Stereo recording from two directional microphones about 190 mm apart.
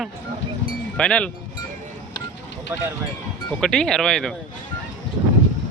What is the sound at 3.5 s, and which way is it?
Speech, 5° left (ahead or behind).